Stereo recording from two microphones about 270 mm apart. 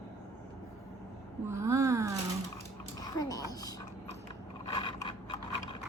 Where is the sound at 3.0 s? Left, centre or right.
Centre.